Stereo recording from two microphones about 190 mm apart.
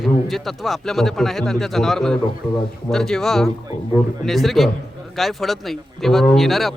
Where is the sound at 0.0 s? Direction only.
Centre (ahead or behind).